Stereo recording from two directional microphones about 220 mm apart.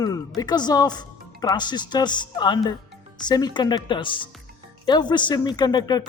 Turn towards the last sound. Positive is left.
turn(degrees=20)  # may be behind; listen again after turning